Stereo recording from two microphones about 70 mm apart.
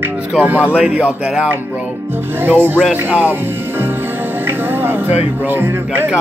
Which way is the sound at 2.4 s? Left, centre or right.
Right.